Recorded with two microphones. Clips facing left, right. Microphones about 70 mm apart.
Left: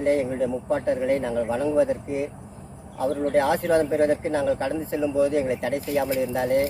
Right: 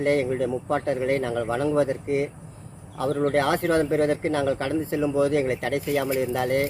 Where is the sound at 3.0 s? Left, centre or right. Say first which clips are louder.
Left 1 dB; right.